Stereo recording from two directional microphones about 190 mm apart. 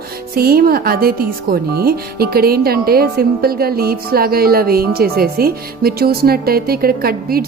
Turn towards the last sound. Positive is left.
turn(degrees=-50)  # may be behind; listen again after turning